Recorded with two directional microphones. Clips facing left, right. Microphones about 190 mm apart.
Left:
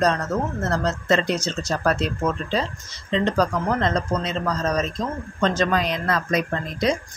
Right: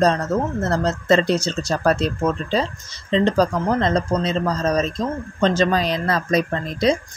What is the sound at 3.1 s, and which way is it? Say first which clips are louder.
Speech: right 3 dB; 30° right (ahead or behind).